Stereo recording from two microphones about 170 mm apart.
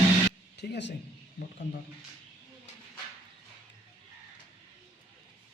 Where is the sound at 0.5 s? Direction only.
85° left.